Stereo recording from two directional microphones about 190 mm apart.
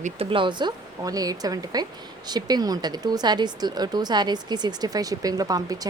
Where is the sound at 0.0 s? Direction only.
30° right (ahead or behind).